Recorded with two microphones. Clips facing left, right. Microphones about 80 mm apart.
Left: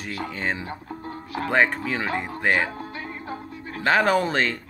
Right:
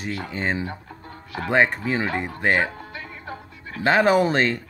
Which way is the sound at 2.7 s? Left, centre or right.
Left.